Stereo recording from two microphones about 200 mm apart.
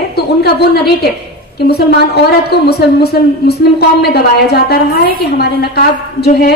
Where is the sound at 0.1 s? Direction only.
55° left (ahead or behind).